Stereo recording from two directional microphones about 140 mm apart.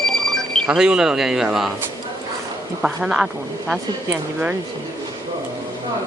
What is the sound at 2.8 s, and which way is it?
Speech, 5° right (ahead or behind).